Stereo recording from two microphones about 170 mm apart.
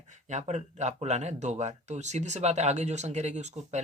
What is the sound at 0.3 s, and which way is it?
Speech, 45° right (ahead or behind).